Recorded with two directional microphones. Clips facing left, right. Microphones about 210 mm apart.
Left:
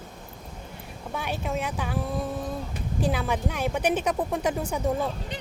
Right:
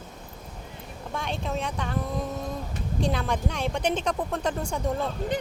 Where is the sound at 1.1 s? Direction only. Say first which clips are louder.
Left 1 dB; 5° left (ahead or behind).